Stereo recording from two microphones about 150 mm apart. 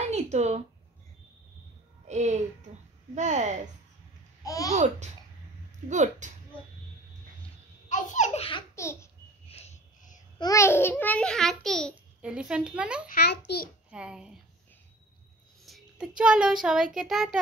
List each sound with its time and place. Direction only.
0.1 s a sound: 50° right (ahead or behind)
2.0 s speech: 50° right (ahead or behind)
4.5 s a child's voice: 20° left (ahead or behind)
5.9 s speech: 55° right (ahead or behind)
7.9 s speech: 55° left (ahead or behind)
8.7 s babbling: 20° left (ahead or behind)
9.5 s a sound: 45° left (ahead or behind)
10.4 s a child's voice: 20° left (ahead or behind); by 13.0 s 5° right (ahead or behind)
13.5 s a child's voice: 90° left
13.8 s a child's voice: 5° right (ahead or behind)
15.6 s a sound: centre (ahead or behind)
16.2 s child singing: 5° right (ahead or behind)